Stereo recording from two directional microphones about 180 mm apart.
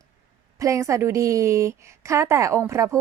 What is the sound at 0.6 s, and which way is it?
A woman's voice, 15° right (ahead or behind).